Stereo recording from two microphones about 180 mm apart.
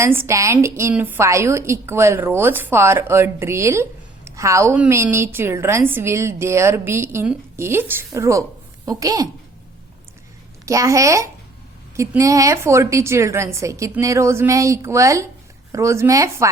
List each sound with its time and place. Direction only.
0.0 s a woman's voice: 15° right (ahead or behind)
10.7 s a woman's voice: 15° right (ahead or behind)